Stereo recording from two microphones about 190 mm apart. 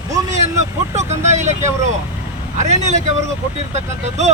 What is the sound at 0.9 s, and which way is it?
Vehicle, 35° right (ahead or behind).